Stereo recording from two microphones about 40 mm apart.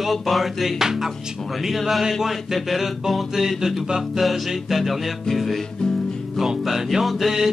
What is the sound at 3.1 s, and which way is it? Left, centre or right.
Speech, centre.